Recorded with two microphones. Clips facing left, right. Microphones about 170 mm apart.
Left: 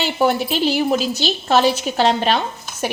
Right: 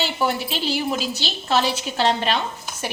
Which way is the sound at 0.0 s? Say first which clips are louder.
Left 5 dB; 50° left (ahead or behind).